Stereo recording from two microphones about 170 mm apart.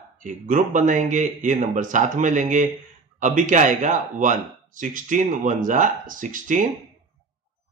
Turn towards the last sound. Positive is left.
turn(degrees=-50)  # may be behind; listen again after turning